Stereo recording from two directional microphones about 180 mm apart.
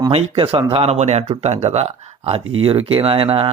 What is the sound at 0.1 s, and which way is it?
A man's voice, 30° right (ahead or behind).